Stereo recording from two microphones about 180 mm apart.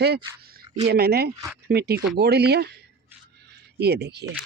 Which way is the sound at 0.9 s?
60° right (ahead or behind).